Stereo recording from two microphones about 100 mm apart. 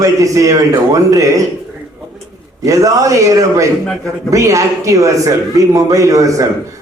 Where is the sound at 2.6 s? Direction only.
35° right (ahead or behind).